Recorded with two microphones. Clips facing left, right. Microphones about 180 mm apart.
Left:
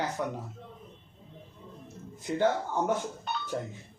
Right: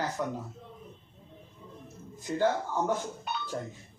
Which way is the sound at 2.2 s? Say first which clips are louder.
Left 1 dB; 15° left (ahead or behind).